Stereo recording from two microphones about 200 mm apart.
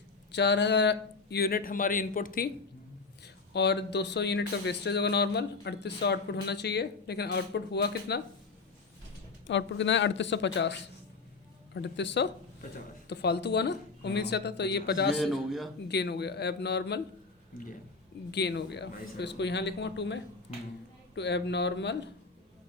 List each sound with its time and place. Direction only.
0.3 s speech: 60° left (ahead or behind); by 2.5 s 45° left (ahead or behind)
3.5 s speech: 55° left (ahead or behind)
9.5 s speech: 65° left (ahead or behind)
15.1 s a man's voice: centre (ahead or behind)
15.9 s speech: 55° left (ahead or behind)
18.3 s speech: 55° left (ahead or behind)
20.5 s speech: 40° left (ahead or behind)
21.2 s speech: 60° left (ahead or behind)